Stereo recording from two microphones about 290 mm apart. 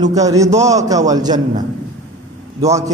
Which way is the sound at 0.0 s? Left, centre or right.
Centre.